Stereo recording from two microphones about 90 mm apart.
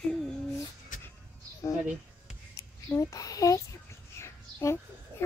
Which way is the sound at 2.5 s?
35° left (ahead or behind).